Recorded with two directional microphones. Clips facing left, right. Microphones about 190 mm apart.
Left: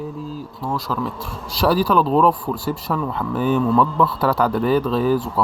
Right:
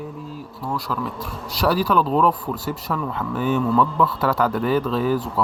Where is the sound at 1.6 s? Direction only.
35° left (ahead or behind).